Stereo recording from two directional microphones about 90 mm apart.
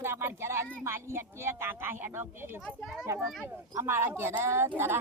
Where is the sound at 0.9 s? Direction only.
25° right (ahead or behind).